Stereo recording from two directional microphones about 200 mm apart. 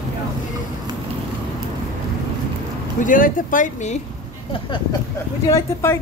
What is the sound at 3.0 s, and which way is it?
Speech, 40° left (ahead or behind).